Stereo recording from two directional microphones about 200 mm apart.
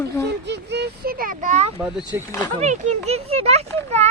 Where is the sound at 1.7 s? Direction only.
5° right (ahead or behind).